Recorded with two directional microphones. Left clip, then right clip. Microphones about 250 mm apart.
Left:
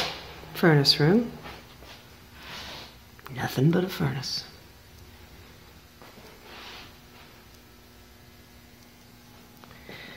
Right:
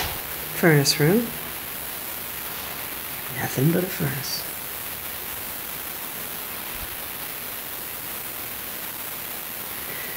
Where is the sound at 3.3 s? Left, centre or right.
Centre.